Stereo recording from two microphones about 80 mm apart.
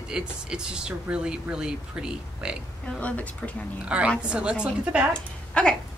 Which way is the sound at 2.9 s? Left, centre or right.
Centre.